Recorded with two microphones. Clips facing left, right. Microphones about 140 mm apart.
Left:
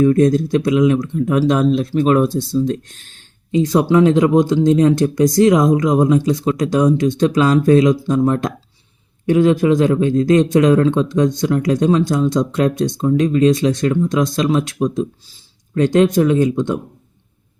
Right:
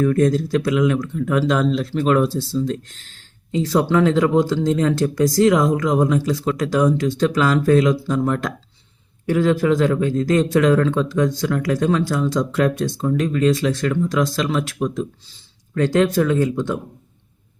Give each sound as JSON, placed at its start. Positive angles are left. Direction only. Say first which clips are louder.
{"t": 0.0, "sound": "a man's voice", "louder": "left 4 dB", "side_deg": 20}